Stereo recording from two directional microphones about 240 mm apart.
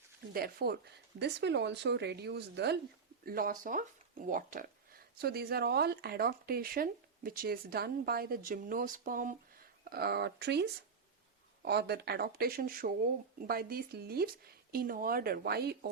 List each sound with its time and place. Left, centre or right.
0.3 s a woman's voice: right